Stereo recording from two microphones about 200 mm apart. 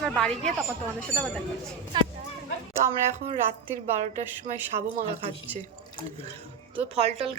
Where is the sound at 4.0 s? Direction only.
35° right (ahead or behind).